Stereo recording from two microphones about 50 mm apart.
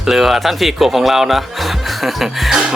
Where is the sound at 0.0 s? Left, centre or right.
Centre.